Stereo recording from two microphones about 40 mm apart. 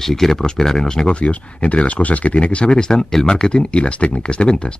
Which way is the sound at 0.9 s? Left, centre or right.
Centre.